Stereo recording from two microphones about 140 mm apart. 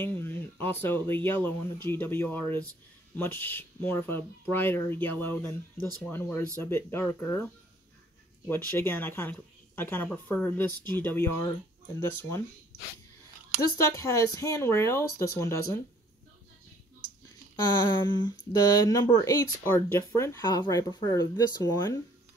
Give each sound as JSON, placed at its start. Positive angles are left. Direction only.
{"t": 0.0, "sound": "speech", "side_deg": 15}
{"t": 8.5, "sound": "speech", "side_deg": 15}
{"t": 13.6, "sound": "speech", "side_deg": 20}
{"t": 17.8, "sound": "speech", "side_deg": 30}